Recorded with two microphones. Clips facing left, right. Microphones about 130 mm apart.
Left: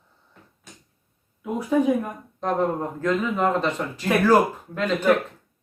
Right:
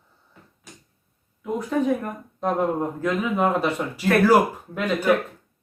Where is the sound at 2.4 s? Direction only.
10° right (ahead or behind).